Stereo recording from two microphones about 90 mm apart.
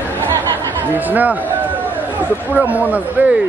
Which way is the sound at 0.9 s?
20° right (ahead or behind).